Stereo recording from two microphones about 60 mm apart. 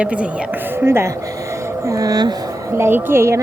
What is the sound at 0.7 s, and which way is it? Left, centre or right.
Speech, right.